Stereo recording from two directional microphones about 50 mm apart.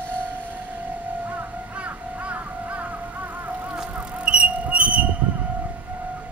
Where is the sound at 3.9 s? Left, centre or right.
Right.